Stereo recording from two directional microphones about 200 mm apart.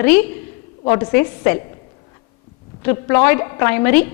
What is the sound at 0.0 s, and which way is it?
A woman's voice, 10° left (ahead or behind).